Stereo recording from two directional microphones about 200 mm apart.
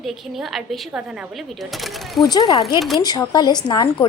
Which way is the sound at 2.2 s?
20° left (ahead or behind).